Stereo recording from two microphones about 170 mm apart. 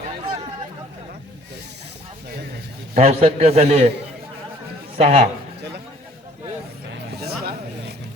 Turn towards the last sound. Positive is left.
turn(degrees=-70)  # may be behind; listen again after turning